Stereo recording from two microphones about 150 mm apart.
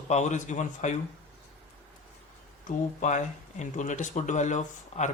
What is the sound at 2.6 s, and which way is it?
Speech, 55° left (ahead or behind).